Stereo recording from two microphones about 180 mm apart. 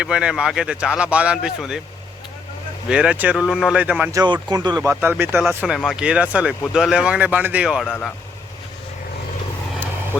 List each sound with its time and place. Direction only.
0.0 s speech: 5° right (ahead or behind)
2.9 s speech: 5° right (ahead or behind)
4.1 s speech: 20° right (ahead or behind); by 7.9 s 5° right (ahead or behind)
7.9 s speech: 10° left (ahead or behind)